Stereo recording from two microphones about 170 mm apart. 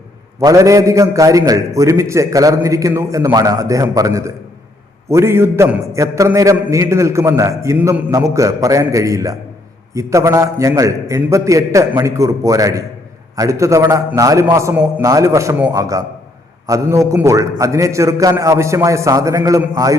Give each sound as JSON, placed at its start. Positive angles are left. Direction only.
{"t": 0.3, "sound": "a man's voice", "side_deg": -20}